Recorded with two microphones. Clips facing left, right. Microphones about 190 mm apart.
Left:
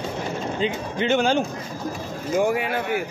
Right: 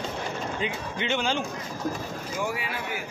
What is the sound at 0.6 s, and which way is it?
A man's voice, 40° left (ahead or behind).